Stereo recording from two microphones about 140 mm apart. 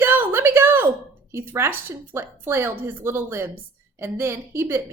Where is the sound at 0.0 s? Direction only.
15° right (ahead or behind).